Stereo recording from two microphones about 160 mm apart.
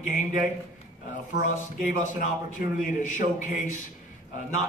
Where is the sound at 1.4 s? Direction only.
50° left (ahead or behind).